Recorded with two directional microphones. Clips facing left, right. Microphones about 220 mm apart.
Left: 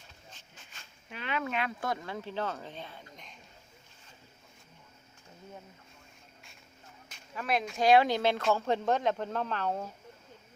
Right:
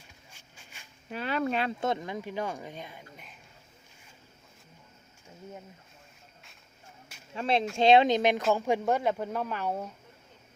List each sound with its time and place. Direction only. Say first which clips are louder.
0.3 s a sound: left 1 dB; 10° right (ahead or behind)
1.1 s speech: right 5 dB; 40° right (ahead or behind); by 3.3 s 10° right (ahead or behind)
7.3 s speech: right 4 dB; 25° right (ahead or behind); by 9.8 s 10° right (ahead or behind)